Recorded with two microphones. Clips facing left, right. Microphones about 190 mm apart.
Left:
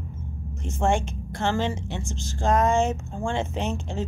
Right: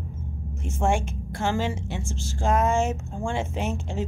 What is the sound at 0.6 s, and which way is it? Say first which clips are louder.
A woman's voice: left 1 dB; 10° right (ahead or behind).